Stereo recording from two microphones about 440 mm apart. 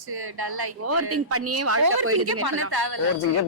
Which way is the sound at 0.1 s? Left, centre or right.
Right.